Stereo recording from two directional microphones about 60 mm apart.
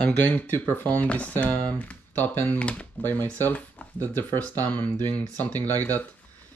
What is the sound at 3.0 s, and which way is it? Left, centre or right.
Speech, left.